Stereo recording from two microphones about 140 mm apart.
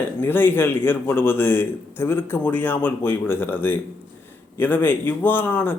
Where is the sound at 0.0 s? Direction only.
15° left (ahead or behind).